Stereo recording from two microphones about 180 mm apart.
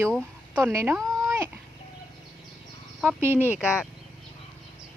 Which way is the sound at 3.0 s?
10° right (ahead or behind).